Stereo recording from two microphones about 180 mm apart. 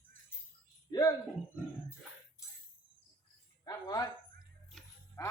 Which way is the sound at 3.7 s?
20° left (ahead or behind).